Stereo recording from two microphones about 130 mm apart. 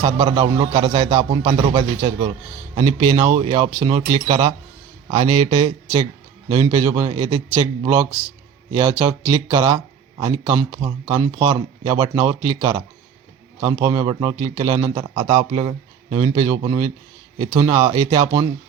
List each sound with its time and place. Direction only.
0.0 s speech: 40° right (ahead or behind)